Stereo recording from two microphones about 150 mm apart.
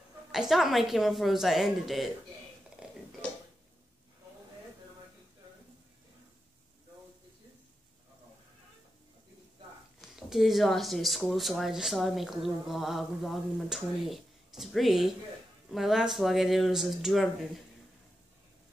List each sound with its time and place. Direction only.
0.3 s speech: centre (ahead or behind)
2.8 s burping: 5° right (ahead or behind)
10.1 s speech: centre (ahead or behind)